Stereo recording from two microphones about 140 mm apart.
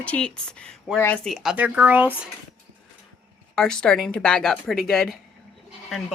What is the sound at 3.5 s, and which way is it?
Speech, 5° left (ahead or behind).